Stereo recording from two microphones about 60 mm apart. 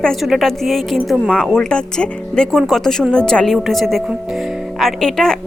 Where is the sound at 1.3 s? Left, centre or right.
Centre.